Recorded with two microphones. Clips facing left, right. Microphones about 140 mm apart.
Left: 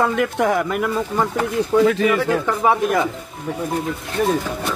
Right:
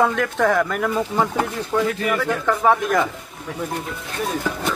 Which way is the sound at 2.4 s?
10° left (ahead or behind).